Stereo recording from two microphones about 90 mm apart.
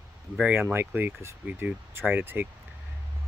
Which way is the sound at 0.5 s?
20° right (ahead or behind).